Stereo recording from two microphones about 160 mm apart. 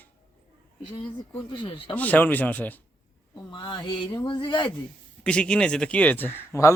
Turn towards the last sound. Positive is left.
turn(degrees=15)  # may be behind; listen again after turning